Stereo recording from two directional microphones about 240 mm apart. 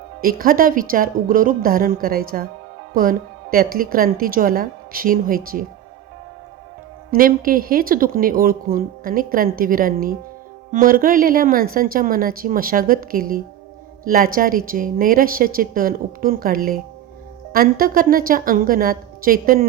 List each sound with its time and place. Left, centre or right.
0.2 s speech: right
7.1 s speech: right